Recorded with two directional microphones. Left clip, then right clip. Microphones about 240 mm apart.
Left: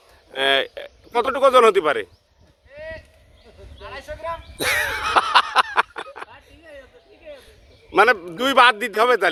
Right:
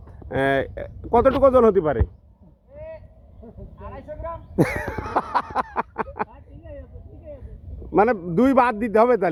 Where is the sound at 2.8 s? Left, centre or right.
Centre.